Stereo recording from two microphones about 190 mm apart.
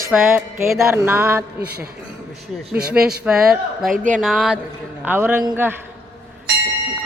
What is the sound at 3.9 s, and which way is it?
Speech, 40° right (ahead or behind).